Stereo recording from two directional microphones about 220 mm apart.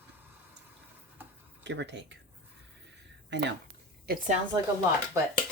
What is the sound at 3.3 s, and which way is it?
Speech, 55° right (ahead or behind).